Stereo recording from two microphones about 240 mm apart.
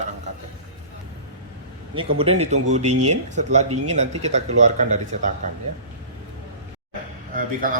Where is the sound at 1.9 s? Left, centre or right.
Right.